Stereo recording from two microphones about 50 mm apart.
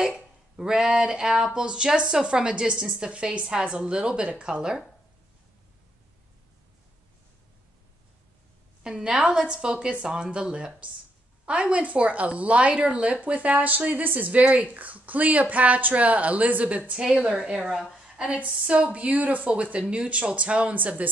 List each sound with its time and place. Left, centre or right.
0.0 s speech: centre
8.8 s a woman's voice: centre
18.1 s a woman's voice: right